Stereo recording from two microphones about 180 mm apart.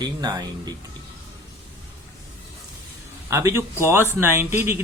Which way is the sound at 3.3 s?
15° right (ahead or behind).